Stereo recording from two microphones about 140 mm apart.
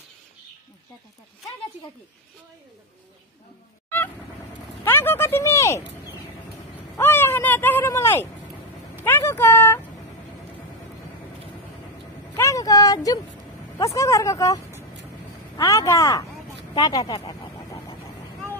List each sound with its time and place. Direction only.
4.8 s speech: 15° left (ahead or behind)
7.0 s speech: 15° left (ahead or behind)
12.4 s speech: 20° left (ahead or behind)
17.3 s a sound: 30° left (ahead or behind)